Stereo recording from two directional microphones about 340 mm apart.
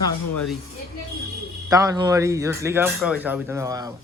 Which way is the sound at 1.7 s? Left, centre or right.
Centre.